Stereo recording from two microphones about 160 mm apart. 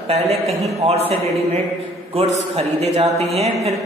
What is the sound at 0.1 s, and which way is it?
A woman's voice, 40° right (ahead or behind).